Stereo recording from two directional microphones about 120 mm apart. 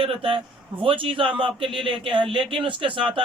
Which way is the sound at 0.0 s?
50° right (ahead or behind).